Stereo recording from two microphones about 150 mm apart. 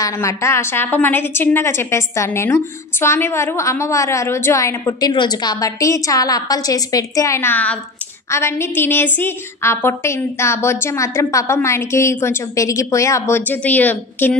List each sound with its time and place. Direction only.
0.0 s a woman's voice: 20° left (ahead or behind)